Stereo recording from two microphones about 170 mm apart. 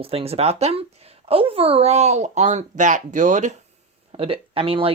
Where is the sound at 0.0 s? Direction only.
35° right (ahead or behind).